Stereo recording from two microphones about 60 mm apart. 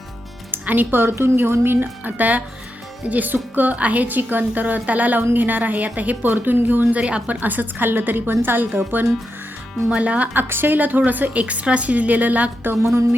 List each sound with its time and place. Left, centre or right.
0.5 s a woman's voice: right
9.9 s a woman's voice: right
10.3 s a woman's voice: right
12.8 s speech: right